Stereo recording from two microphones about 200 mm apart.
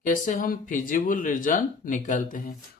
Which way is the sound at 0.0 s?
45° left (ahead or behind).